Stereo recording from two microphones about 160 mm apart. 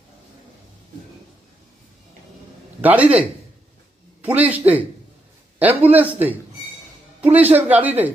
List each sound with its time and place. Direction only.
2.8 s speech: 10° right (ahead or behind)